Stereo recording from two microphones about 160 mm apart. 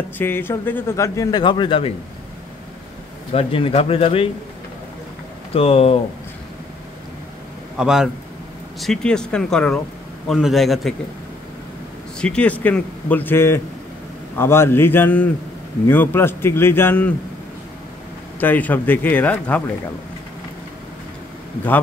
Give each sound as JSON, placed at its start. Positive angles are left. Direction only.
{"t": 0.2, "sound": "a man's voice", "side_deg": 15}
{"t": 3.3, "sound": "speech", "side_deg": 35}
{"t": 5.5, "sound": "speech", "side_deg": 40}
{"t": 7.7, "sound": "speech", "side_deg": -5}
{"t": 12.2, "sound": "a man's voice", "side_deg": 5}
{"t": 18.4, "sound": "a man's voice", "side_deg": 10}